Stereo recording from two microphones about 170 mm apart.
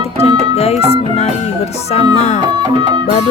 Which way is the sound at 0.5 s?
35° left (ahead or behind).